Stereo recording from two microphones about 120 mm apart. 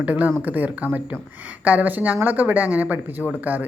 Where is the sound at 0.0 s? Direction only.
15° right (ahead or behind).